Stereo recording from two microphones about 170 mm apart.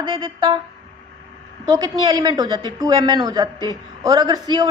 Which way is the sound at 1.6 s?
20° right (ahead or behind).